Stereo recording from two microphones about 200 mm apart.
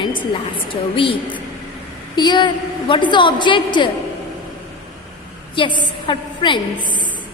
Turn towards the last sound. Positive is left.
turn(degrees=25)  # may be behind; listen again after turning